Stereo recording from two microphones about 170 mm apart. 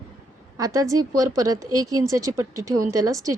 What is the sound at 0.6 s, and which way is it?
A woman's voice, 20° right (ahead or behind).